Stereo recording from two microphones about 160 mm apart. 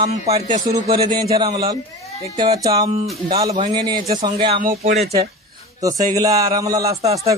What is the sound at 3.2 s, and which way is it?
A man's voice, 35° right (ahead or behind).